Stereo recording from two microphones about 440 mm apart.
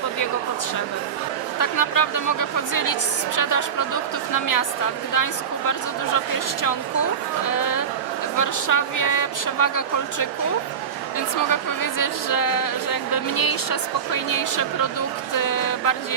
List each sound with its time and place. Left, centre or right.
1.5 s speech: left
11.4 s speech: left